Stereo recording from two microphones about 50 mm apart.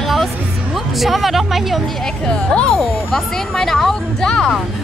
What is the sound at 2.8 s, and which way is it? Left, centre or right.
Speech, centre.